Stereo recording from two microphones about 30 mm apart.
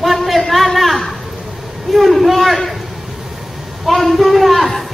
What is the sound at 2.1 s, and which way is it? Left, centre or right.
Speech, centre.